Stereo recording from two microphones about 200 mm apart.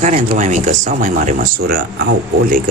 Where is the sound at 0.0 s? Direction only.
35° right (ahead or behind).